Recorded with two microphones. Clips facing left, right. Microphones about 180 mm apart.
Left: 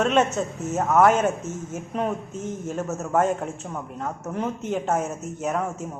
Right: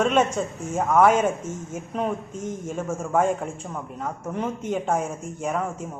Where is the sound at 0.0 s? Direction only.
10° right (ahead or behind).